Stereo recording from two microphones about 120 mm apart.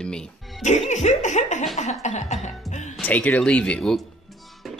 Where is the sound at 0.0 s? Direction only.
5° left (ahead or behind).